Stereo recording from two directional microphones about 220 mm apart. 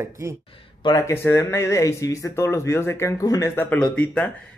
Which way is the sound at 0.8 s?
15° left (ahead or behind).